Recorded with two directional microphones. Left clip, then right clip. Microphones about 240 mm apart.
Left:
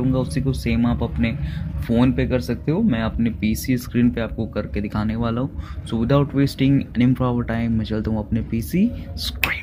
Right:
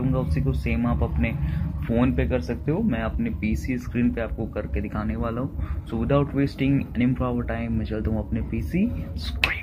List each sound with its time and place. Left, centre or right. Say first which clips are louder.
0.3 s speech: left 4 dB; left